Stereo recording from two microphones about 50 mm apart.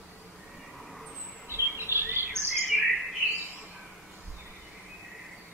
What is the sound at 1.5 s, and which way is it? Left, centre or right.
Chirp, right.